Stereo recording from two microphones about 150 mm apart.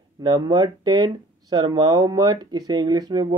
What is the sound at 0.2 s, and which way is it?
Speech, 25° right (ahead or behind).